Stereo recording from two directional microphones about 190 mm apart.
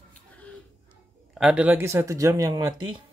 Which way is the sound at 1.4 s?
5° right (ahead or behind).